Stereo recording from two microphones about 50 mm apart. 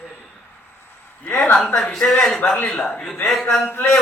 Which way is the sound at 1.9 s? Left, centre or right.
Centre.